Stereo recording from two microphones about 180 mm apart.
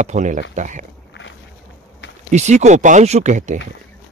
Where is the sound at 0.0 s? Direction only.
40° right (ahead or behind).